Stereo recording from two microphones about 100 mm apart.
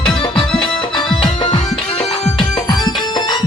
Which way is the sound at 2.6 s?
45° left (ahead or behind).